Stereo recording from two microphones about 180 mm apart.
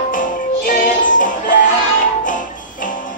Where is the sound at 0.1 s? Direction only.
50° left (ahead or behind).